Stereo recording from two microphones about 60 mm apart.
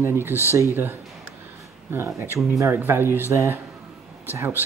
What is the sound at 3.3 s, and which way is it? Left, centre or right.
Speech, right.